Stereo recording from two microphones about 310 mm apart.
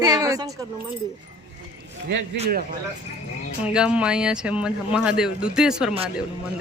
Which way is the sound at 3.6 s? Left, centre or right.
Centre.